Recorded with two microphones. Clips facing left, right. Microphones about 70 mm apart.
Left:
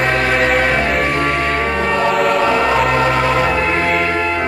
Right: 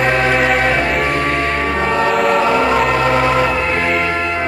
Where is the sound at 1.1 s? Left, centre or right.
Left.